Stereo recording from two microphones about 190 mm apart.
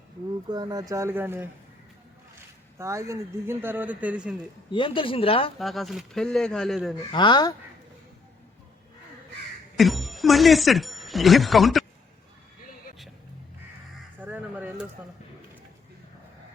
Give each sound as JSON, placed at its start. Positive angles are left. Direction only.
{"t": 0.5, "sound": "speech", "side_deg": -20}
{"t": 2.7, "sound": "speech", "side_deg": -15}
{"t": 4.7, "sound": "speech", "side_deg": 25}
{"t": 5.5, "sound": "speech", "side_deg": 0}
{"t": 7.1, "sound": "speech", "side_deg": 25}
{"t": 9.7, "sound": "speech", "side_deg": 0}
{"t": 14.2, "sound": "a sound", "side_deg": -10}